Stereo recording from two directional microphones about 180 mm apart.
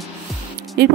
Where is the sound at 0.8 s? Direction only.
60° right (ahead or behind).